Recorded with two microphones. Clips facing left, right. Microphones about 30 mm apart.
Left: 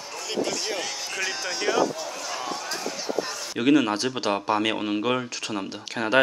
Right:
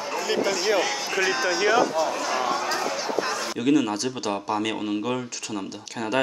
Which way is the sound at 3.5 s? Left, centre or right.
Left.